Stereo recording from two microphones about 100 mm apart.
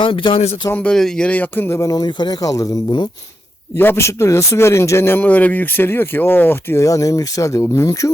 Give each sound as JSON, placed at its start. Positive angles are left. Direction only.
{"t": 0.0, "sound": "speech", "side_deg": 55}
{"t": 0.7, "sound": "speech", "side_deg": 10}
{"t": 3.8, "sound": "speech", "side_deg": 25}